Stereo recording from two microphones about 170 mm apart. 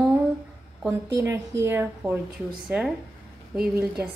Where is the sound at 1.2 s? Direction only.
15° right (ahead or behind).